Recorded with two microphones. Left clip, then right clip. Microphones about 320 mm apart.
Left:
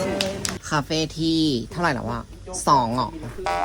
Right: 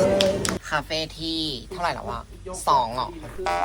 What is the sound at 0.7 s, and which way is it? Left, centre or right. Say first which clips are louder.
Speech: left 5 dB; left.